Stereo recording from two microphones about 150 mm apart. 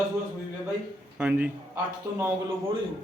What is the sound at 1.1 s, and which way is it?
Speech, 10° right (ahead or behind).